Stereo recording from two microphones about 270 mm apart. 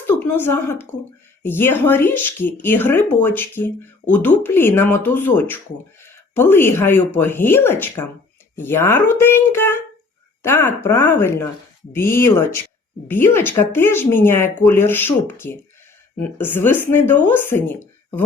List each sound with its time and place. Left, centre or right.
0.1 s a woman's voice: centre